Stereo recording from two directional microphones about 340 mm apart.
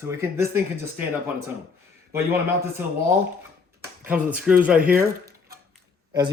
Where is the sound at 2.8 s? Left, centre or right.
Centre.